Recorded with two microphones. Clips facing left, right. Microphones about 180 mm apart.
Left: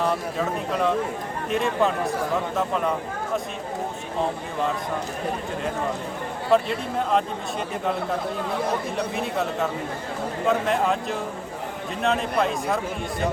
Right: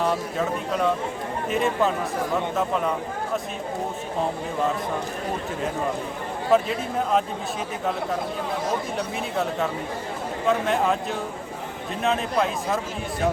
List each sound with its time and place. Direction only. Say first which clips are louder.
0.0 s speech: even; centre (ahead or behind)
6.5 s speech: even; centre (ahead or behind)
9.1 s speech: right 2 dB; centre (ahead or behind)